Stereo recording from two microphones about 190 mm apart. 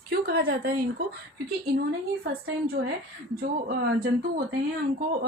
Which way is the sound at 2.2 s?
55° right (ahead or behind).